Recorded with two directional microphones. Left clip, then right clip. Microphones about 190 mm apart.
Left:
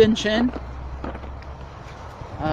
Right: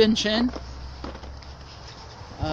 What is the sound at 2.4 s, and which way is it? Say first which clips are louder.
Honk: left 4 dB; 25° right (ahead or behind).